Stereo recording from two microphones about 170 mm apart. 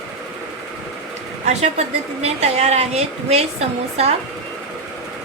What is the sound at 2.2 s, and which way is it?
A woman's voice, 40° right (ahead or behind).